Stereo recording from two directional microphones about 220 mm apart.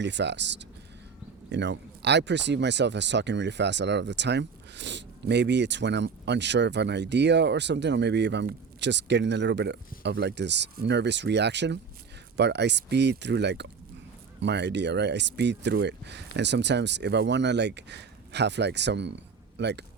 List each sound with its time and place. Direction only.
0.0 s speech: 55° right (ahead or behind)